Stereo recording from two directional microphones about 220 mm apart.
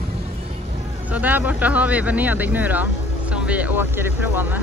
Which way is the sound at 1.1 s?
5° right (ahead or behind).